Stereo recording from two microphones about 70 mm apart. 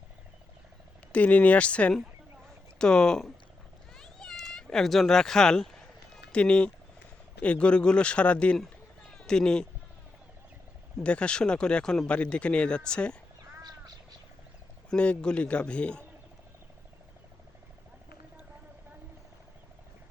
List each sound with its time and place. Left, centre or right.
1.1 s speech: centre
3.9 s a sound: centre
6.3 s speech: centre
11.0 s speech: centre
13.6 s frog: right
14.8 s speech: centre